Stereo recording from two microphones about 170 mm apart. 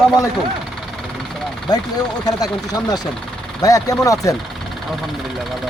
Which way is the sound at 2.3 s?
20° left (ahead or behind).